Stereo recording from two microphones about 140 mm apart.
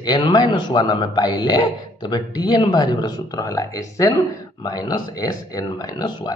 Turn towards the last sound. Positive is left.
turn(degrees=30)  # may be behind; listen again after turning